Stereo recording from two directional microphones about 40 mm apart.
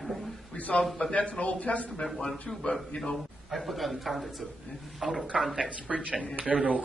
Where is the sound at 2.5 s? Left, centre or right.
Centre.